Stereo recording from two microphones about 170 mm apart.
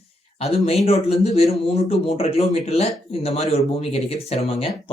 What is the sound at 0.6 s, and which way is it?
Speech, 35° left (ahead or behind).